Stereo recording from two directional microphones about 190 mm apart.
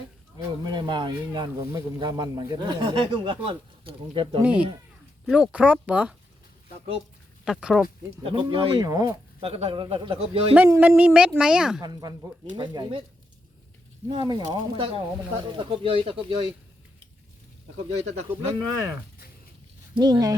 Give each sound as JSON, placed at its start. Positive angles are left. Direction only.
{"t": 0.3, "sound": "speech", "side_deg": -25}
{"t": 5.2, "sound": "speech", "side_deg": -5}
{"t": 7.4, "sound": "speech", "side_deg": 0}
{"t": 8.2, "sound": "speech", "side_deg": -25}
{"t": 10.5, "sound": "a child's voice", "side_deg": -10}
{"t": 11.8, "sound": "speech", "side_deg": -20}
{"t": 14.1, "sound": "speech", "side_deg": -25}
{"t": 18.0, "sound": "speech", "side_deg": -35}
{"t": 19.9, "sound": "speech", "side_deg": -20}